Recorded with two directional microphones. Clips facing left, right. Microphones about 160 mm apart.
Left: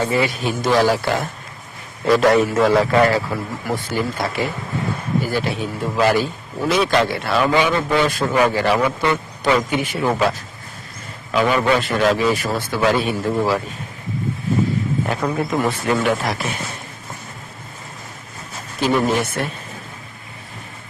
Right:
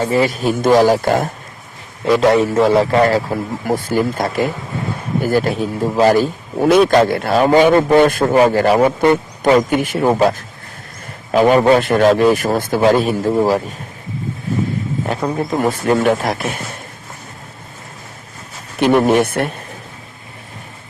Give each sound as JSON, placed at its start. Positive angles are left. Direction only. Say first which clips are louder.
{"t": 0.0, "sound": "a man's voice", "louder": "right 4 dB", "side_deg": -35}
{"t": 2.1, "sound": "a man's voice", "louder": "right 2 dB", "side_deg": -20}
{"t": 3.2, "sound": "a man's voice", "louder": "right 5 dB", "side_deg": -45}
{"t": 6.6, "sound": "a man's voice", "louder": "right 7 dB", "side_deg": -55}
{"t": 8.4, "sound": "a man's voice", "louder": "right 5 dB", "side_deg": -40}
{"t": 15.0, "sound": "a man's voice", "louder": "right 2 dB", "side_deg": -25}
{"t": 15.4, "sound": "a man's voice", "louder": "right 4 dB", "side_deg": -40}
{"t": 18.8, "sound": "speech", "louder": "right 6 dB", "side_deg": -60}